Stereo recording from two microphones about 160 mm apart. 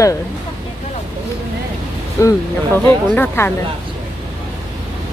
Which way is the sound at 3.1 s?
10° left (ahead or behind).